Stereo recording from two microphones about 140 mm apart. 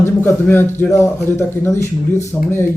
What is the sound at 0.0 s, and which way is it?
A man's voice, 15° left (ahead or behind).